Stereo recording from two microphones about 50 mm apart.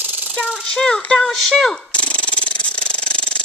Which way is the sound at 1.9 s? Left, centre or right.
Left.